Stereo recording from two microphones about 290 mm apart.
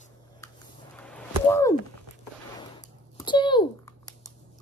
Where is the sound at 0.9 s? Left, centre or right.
Centre.